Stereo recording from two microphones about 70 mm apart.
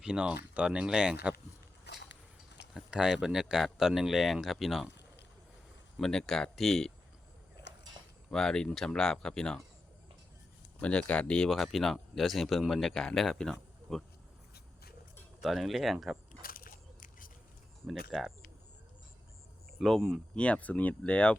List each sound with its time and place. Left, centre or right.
0.0 s speech: centre
2.7 s speech: centre
6.0 s speech: centre
8.3 s speech: centre
10.8 s speech: centre
11.4 s speech: centre
15.4 s speech: centre
17.8 s speech: centre
19.8 s speech: centre
20.3 s speech: centre